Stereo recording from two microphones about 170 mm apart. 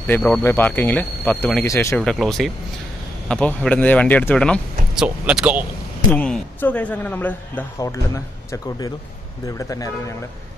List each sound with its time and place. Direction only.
0.0 s a man's voice: 10° left (ahead or behind)
2.0 s a man's voice: centre (ahead or behind)
5.0 s speech: 5° right (ahead or behind)
6.1 s a man's voice: 5° left (ahead or behind)